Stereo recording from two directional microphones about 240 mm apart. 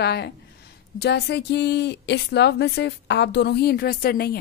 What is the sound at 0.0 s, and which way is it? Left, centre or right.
A woman's voice, left.